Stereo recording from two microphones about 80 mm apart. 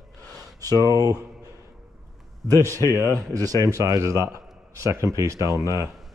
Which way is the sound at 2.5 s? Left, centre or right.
Right.